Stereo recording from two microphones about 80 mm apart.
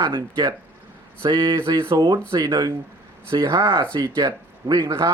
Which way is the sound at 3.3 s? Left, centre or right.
Right.